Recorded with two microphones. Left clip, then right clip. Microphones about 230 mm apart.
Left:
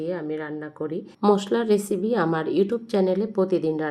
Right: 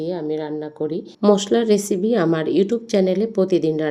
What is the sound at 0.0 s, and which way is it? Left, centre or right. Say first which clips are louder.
Speech: right 4 dB; centre.